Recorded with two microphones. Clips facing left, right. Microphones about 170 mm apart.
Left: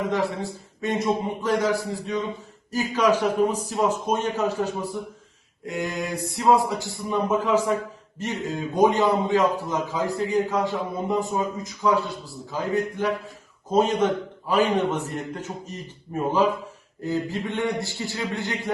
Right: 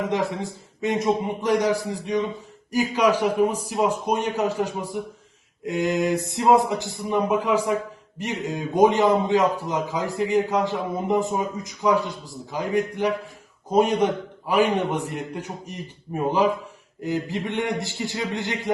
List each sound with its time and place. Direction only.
0.1 s a man's voice: 20° right (ahead or behind)
17.0 s a man's voice: 15° right (ahead or behind)